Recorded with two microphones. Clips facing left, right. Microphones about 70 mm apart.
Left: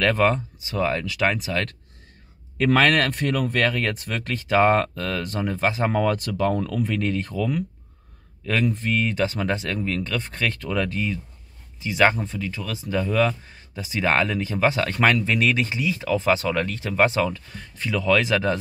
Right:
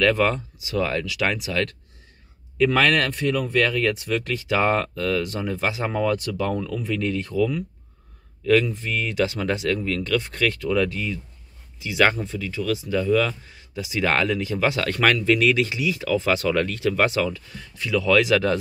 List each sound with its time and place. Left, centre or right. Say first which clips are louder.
0.0 s speech: even; left